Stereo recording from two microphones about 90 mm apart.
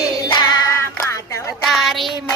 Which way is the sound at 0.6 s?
30° left (ahead or behind).